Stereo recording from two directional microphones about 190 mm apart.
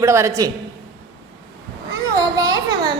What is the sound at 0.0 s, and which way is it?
Speech, 15° right (ahead or behind).